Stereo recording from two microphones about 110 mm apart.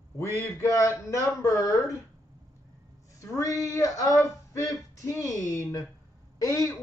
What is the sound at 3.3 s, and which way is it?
Speech, 30° left (ahead or behind).